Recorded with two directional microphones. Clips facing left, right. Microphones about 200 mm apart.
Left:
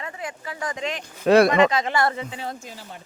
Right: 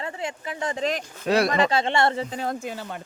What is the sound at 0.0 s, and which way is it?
Speech, 30° right (ahead or behind).